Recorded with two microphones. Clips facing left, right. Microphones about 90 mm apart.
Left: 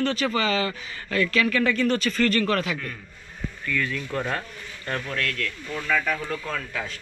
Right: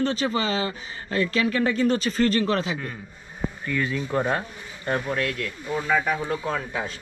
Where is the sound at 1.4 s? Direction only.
20° right (ahead or behind).